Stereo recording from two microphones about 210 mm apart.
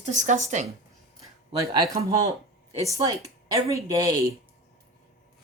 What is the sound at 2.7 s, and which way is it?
A woman's voice, 15° right (ahead or behind).